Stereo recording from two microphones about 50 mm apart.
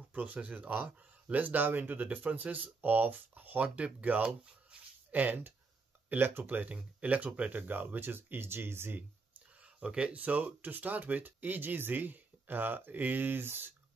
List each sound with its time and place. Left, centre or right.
0.1 s speech: right
4.6 s a sound: right
6.0 s speech: right
6.4 s speech: right
9.6 s speech: right